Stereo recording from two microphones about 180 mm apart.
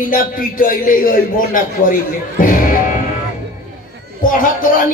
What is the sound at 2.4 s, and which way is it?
Music, 50° left (ahead or behind).